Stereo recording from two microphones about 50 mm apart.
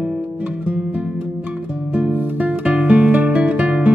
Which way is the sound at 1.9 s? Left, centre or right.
Right.